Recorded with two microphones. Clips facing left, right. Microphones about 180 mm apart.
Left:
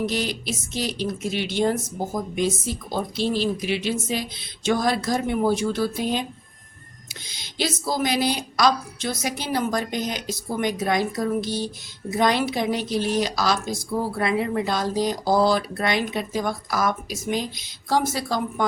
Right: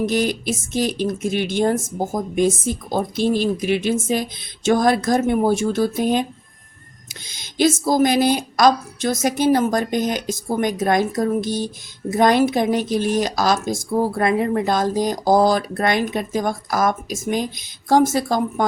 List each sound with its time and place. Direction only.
0.0 s a woman's voice: 50° right (ahead or behind)
7.3 s a woman's voice: 50° right (ahead or behind)